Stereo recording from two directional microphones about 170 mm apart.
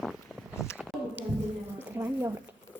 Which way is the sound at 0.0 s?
Centre (ahead or behind).